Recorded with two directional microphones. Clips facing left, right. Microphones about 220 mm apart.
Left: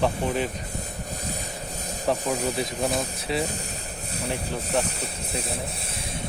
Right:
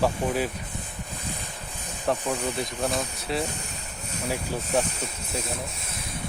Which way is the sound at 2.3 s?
35° left (ahead or behind).